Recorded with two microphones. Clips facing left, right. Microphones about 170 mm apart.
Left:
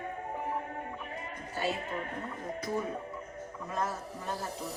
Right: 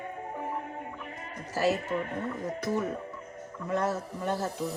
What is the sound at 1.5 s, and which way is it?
Speech, 80° right.